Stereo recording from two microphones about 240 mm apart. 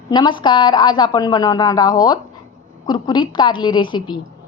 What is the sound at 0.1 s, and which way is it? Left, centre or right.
A woman's voice, centre.